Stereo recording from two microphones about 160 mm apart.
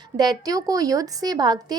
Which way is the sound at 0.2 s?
25° right (ahead or behind).